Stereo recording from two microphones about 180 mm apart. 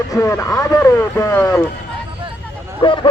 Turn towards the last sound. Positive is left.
turn(degrees=30)  # may be behind; listen again after turning